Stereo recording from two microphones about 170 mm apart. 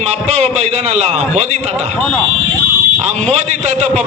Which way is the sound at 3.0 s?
40° right (ahead or behind).